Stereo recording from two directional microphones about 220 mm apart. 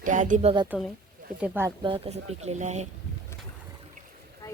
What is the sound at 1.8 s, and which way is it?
Speech, 25° right (ahead or behind).